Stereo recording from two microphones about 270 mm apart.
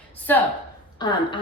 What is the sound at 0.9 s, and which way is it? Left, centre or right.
Speech, centre.